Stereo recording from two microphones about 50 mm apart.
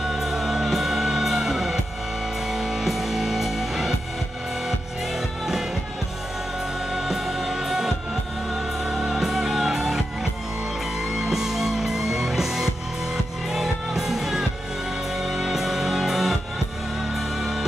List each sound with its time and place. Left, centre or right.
0.0 s music: centre
6.9 s music: centre
11.1 s music: centre